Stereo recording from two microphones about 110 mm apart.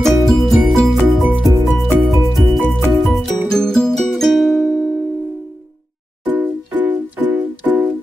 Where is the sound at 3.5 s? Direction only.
5° left (ahead or behind).